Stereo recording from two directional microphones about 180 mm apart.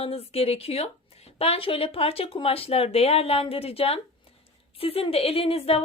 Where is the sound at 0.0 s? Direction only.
35° left (ahead or behind).